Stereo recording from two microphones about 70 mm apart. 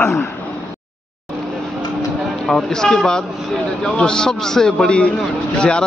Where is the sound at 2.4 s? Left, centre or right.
Centre.